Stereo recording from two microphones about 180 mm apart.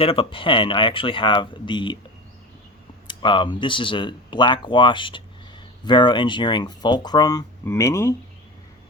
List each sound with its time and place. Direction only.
0.0 s speech: 30° left (ahead or behind)
3.1 s speech: 25° left (ahead or behind)